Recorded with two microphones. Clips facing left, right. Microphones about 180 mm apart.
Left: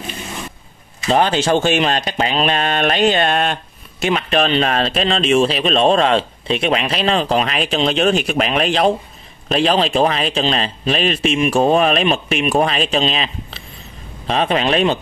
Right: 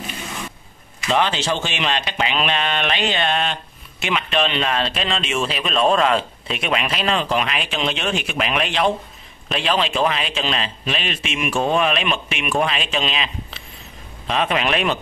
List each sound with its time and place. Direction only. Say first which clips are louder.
1.0 s speech: left 5 dB; 40° left (ahead or behind)